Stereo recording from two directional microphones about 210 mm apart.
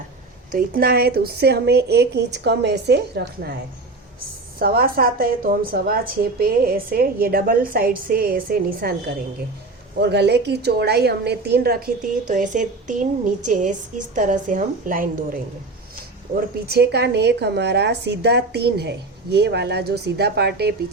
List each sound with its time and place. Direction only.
0.5 s a woman's voice: 45° right (ahead or behind)
4.6 s a woman's voice: 45° right (ahead or behind)
10.0 s a woman's voice: 55° right (ahead or behind)